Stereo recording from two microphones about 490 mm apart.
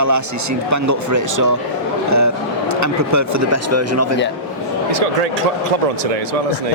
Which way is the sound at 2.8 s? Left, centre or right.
Right.